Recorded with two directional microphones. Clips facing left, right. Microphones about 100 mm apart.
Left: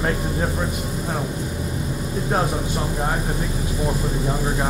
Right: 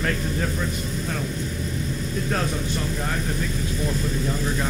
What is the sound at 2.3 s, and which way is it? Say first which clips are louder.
Speech: left 5 dB; 20° left (ahead or behind).